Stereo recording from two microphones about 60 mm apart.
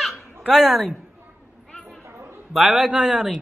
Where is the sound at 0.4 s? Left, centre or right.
Centre.